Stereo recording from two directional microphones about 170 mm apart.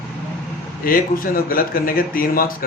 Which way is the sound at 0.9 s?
55° left (ahead or behind).